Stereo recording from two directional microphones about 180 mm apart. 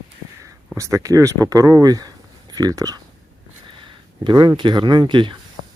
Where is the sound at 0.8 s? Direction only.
15° right (ahead or behind).